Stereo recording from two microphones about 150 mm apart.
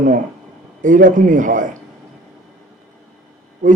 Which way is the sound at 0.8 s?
60° right (ahead or behind).